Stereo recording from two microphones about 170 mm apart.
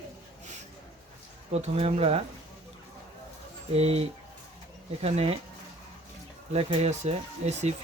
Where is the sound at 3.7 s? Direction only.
35° right (ahead or behind).